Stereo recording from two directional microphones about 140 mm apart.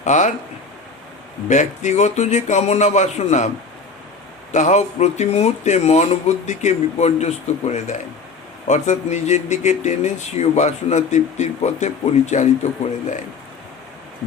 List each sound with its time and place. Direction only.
0.0 s speech: 60° left (ahead or behind)
1.5 s speech: 60° left (ahead or behind)
4.5 s speech: 60° left (ahead or behind)